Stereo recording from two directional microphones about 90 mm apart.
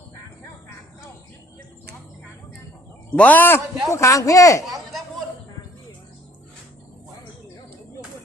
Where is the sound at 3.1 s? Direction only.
20° left (ahead or behind).